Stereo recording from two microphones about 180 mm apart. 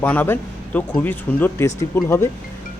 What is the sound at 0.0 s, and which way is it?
Speech, 10° left (ahead or behind).